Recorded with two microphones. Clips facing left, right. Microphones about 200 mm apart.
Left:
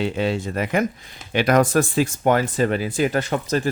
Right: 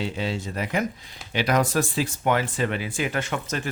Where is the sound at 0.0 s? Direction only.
60° left (ahead or behind).